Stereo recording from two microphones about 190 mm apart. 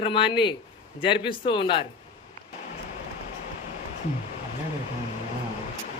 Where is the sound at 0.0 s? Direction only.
25° left (ahead or behind).